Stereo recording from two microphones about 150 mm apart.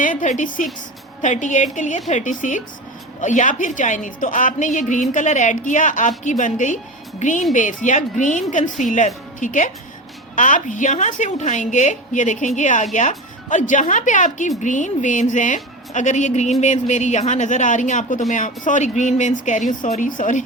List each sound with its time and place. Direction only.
0.0 s a woman's voice: 60° left (ahead or behind)